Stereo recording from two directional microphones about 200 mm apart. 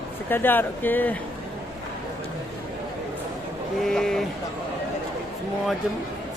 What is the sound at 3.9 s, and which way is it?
Speech, centre (ahead or behind).